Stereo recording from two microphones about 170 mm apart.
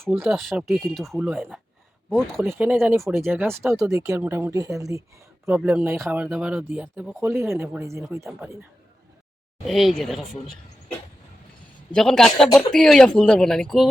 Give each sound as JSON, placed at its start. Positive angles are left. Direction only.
{"t": 0.0, "sound": "speech", "side_deg": -10}
{"t": 0.3, "sound": "speech", "side_deg": 0}
{"t": 3.1, "sound": "speech", "side_deg": -15}
{"t": 9.6, "sound": "speech", "side_deg": 0}
{"t": 11.9, "sound": "speech", "side_deg": 5}